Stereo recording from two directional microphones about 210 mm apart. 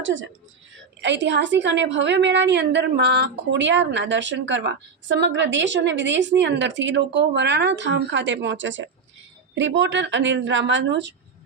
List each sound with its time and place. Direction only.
0.0 s a woman's voice: 65° right (ahead or behind)